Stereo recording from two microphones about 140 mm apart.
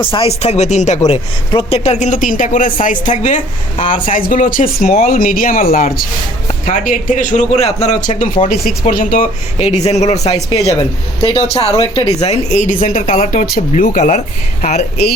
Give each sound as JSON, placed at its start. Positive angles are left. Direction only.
{"t": 0.0, "sound": "speech", "side_deg": 40}
{"t": 1.0, "sound": "speech", "side_deg": 50}
{"t": 5.0, "sound": "a man's voice", "side_deg": 90}
{"t": 6.7, "sound": "a man's voice", "side_deg": 70}
{"t": 8.4, "sound": "speech", "side_deg": 90}
{"t": 9.6, "sound": "a man's voice", "side_deg": 50}
{"t": 13.3, "sound": "a man's voice", "side_deg": 80}